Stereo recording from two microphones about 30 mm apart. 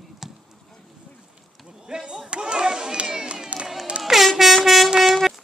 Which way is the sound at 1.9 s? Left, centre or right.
Right.